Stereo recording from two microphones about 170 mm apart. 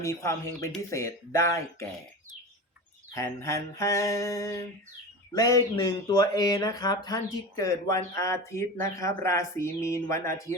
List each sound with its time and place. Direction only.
0.0 s mantra: 15° left (ahead or behind)
3.2 s mantra: 15° left (ahead or behind)
5.3 s a sound: 20° left (ahead or behind)